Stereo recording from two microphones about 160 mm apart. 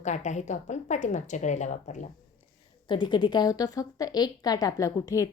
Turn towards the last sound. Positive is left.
turn(degrees=20)  # may be behind; listen again after turning